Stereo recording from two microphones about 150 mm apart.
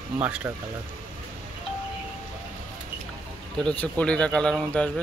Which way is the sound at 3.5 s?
5° left (ahead or behind).